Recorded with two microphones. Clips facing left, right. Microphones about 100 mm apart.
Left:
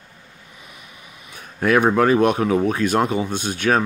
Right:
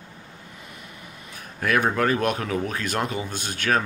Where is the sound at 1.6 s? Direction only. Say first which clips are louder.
Left 6 dB; 25° left (ahead or behind).